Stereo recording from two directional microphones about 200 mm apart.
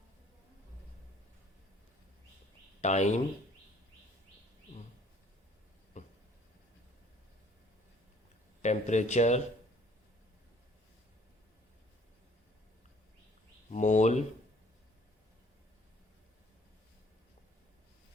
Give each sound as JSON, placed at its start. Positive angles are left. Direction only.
{"t": 2.8, "sound": "speech", "side_deg": 35}
{"t": 6.0, "sound": "a sound", "side_deg": 35}
{"t": 8.6, "sound": "speech", "side_deg": 35}
{"t": 13.7, "sound": "speech", "side_deg": 35}